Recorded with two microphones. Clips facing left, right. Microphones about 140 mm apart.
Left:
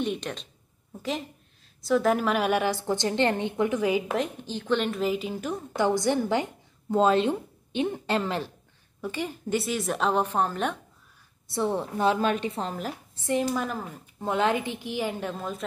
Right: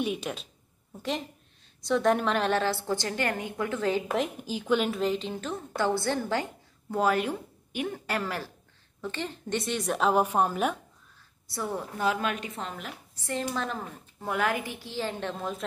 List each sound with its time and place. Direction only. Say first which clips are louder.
0.0 s a woman's voice: left 1 dB; 5° right (ahead or behind); by 4.0 s 15° left (ahead or behind)
4.1 s a woman's voice: even; 5° right (ahead or behind); by 8.5 s 20° left (ahead or behind)
9.0 s a woman's voice: left 3 dB; 10° left (ahead or behind); by 10.8 s 10° right (ahead or behind)
11.5 s a woman's voice: left 6 dB; 25° left (ahead or behind)
13.2 s a woman's voice: left 5 dB; 15° left (ahead or behind)
14.2 s a woman's voice: left 4 dB; 25° left (ahead or behind); by 15.6 s centre (ahead or behind)